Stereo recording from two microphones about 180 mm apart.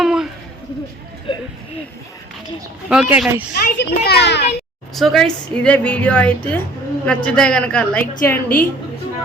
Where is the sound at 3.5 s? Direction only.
60° left (ahead or behind).